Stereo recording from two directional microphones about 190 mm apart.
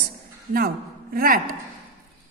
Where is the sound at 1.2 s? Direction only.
50° right (ahead or behind).